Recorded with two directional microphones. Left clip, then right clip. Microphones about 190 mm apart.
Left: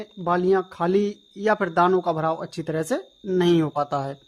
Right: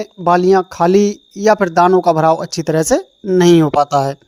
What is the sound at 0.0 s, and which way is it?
Speech, 40° right (ahead or behind).